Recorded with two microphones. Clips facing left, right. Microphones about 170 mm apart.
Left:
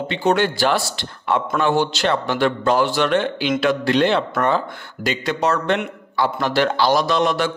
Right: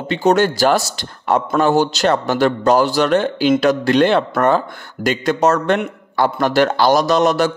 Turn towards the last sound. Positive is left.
turn(degrees=-40)  # may be behind; listen again after turning